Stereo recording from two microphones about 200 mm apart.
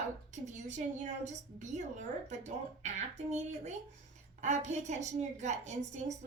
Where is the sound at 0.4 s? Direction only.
35° right (ahead or behind).